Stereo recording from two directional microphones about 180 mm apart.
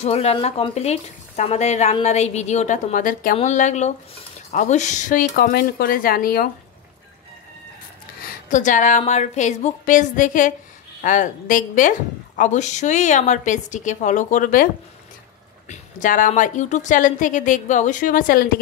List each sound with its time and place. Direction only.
0.0 s a woman's voice: 35° left (ahead or behind)
5.3 s speech: 60° left (ahead or behind)
8.3 s a woman's voice: 45° left (ahead or behind)
15.7 s a woman's voice: 45° left (ahead or behind)